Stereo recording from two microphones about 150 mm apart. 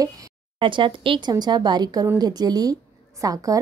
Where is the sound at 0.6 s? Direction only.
30° right (ahead or behind).